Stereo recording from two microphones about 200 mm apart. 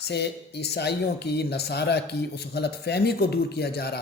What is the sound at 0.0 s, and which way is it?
Speech, 55° left (ahead or behind).